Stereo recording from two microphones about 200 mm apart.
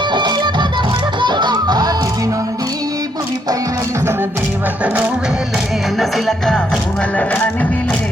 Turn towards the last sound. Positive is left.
turn(degrees=10)  # may be behind; listen again after turning